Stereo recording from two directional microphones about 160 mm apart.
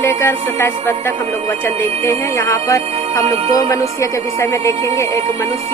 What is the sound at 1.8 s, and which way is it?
Music, 15° left (ahead or behind).